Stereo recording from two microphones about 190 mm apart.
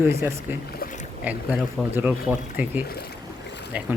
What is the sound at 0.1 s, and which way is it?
Speech, 15° right (ahead or behind).